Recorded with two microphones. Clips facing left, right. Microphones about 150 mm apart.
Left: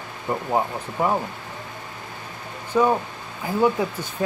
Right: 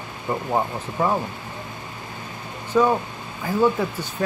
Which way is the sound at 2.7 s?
10° left (ahead or behind).